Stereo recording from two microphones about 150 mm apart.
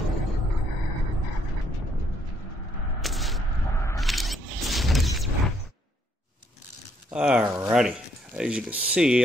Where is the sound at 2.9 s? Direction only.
Centre (ahead or behind).